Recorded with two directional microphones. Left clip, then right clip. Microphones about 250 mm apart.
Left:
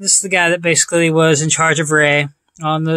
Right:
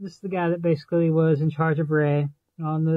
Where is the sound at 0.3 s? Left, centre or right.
Centre.